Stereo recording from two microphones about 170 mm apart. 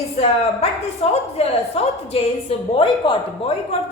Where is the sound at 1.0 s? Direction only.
35° left (ahead or behind).